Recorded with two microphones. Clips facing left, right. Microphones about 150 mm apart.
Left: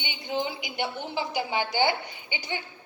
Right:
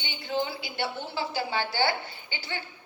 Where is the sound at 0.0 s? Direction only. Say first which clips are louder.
Even; 15° left (ahead or behind).